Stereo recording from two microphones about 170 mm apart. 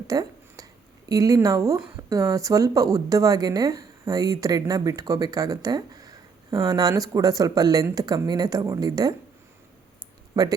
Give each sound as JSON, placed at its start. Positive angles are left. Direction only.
{"t": 0.1, "sound": "speech", "side_deg": -20}
{"t": 10.3, "sound": "speech", "side_deg": -20}